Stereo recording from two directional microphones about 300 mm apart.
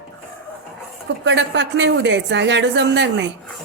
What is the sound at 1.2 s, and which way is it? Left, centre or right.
A woman's voice, right.